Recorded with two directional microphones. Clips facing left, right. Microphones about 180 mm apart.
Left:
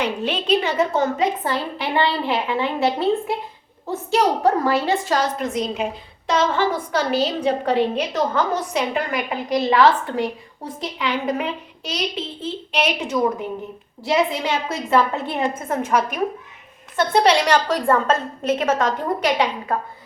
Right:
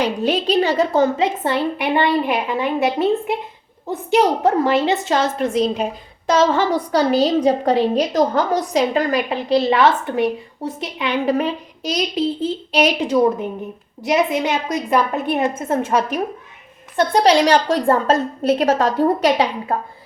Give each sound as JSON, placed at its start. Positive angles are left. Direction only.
{"t": 0.0, "sound": "a woman's voice", "side_deg": -35}
{"t": 11.3, "sound": "a woman's voice", "side_deg": -40}
{"t": 14.0, "sound": "a woman's voice", "side_deg": -20}
{"t": 17.2, "sound": "a woman's voice", "side_deg": -30}